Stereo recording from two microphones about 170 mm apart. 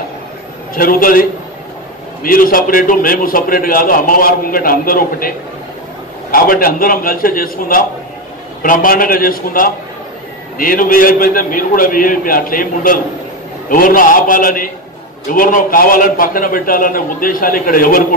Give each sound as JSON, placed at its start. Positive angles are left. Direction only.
{"t": 0.7, "sound": "a man's voice", "side_deg": 55}
{"t": 2.2, "sound": "a man's voice", "side_deg": 55}
{"t": 6.3, "sound": "a man's voice", "side_deg": 55}